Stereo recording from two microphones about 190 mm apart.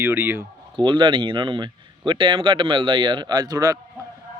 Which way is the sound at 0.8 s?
25° right (ahead or behind).